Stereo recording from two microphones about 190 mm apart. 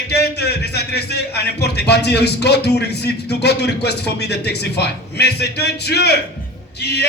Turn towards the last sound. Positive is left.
turn(degrees=60)  # may be behind; listen again after turning